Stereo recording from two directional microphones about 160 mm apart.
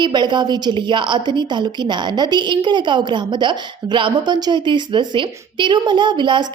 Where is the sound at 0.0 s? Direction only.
30° right (ahead or behind).